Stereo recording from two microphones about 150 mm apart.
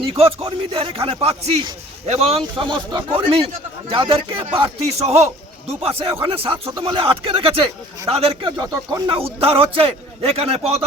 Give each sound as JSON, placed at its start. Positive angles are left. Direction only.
{"t": 0.0, "sound": "a man's voice", "side_deg": -40}
{"t": 8.5, "sound": "speech", "side_deg": -25}
{"t": 9.0, "sound": "a man's voice", "side_deg": -40}